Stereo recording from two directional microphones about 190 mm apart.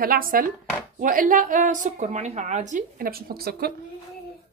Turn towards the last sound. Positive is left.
turn(degrees=-55)  # may be behind; listen again after turning